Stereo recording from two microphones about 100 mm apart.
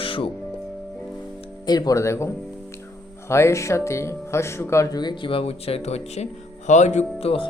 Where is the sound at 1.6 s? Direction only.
40° left (ahead or behind).